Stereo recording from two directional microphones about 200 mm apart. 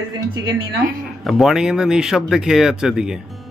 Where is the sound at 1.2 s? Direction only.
Centre (ahead or behind).